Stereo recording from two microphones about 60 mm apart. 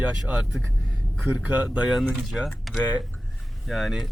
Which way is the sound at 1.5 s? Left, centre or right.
Right.